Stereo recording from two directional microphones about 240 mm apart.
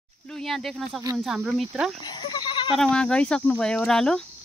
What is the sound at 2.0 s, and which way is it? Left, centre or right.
Goat, centre.